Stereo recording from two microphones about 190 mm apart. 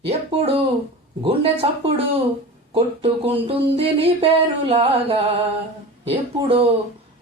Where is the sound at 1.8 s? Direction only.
30° right (ahead or behind).